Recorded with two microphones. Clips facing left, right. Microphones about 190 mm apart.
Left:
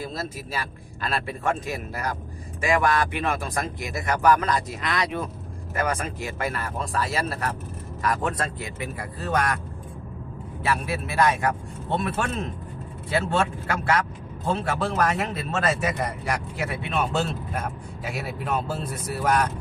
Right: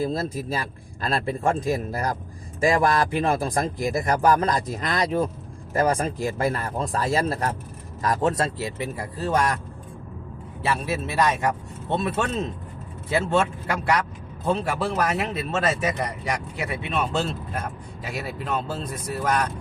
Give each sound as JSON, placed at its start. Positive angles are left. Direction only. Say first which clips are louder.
{"t": 1.0, "sound": "a man's voice", "louder": "right 3 dB", "side_deg": -30}
{"t": 10.6, "sound": "a man's voice", "louder": "right 1 dB", "side_deg": -25}
{"t": 14.8, "sound": "speech", "louder": "even", "side_deg": -5}